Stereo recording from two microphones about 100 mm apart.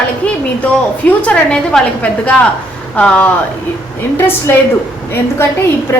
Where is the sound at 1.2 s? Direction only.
10° left (ahead or behind).